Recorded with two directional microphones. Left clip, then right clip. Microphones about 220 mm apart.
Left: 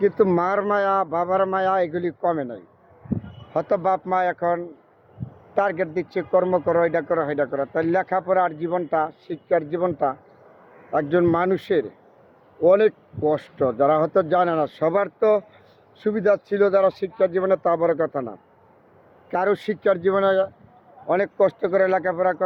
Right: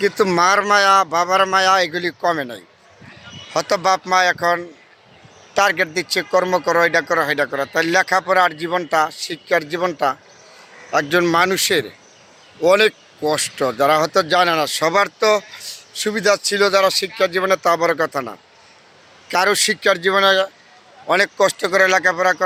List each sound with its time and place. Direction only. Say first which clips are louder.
0.0 s speech: right 4 dB; 5° right (ahead or behind)